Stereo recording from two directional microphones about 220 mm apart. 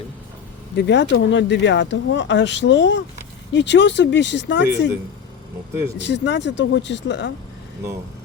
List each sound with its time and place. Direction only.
0.8 s speech: 50° left (ahead or behind)
6.0 s speech: 55° left (ahead or behind)